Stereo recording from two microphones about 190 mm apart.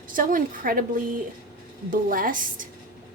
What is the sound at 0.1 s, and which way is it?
Speech, 45° right (ahead or behind).